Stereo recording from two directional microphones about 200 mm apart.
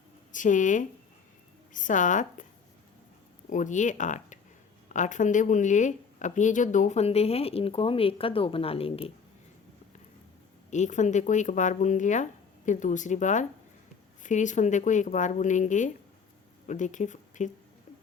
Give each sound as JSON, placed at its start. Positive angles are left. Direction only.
{"t": 0.3, "sound": "speech", "side_deg": 40}
{"t": 3.5, "sound": "speech", "side_deg": 40}
{"t": 10.7, "sound": "speech", "side_deg": 35}